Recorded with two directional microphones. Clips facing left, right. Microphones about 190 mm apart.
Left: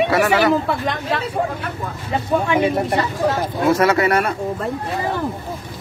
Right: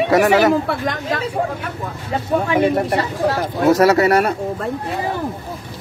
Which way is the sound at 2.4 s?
35° right (ahead or behind).